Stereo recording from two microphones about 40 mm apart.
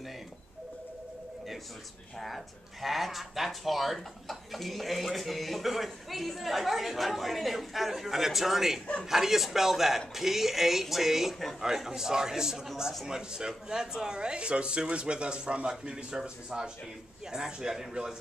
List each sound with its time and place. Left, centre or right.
2.1 s speech: centre; by 18.1 s right